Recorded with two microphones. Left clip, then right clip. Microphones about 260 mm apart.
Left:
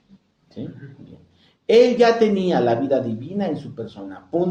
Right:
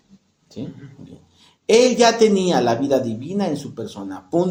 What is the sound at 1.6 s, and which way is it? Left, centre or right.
Speech, right.